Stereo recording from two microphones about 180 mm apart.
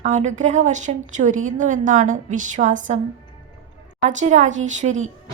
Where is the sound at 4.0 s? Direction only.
40° right (ahead or behind).